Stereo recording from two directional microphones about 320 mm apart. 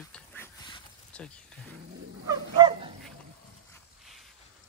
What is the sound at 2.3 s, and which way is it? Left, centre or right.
Dog, centre.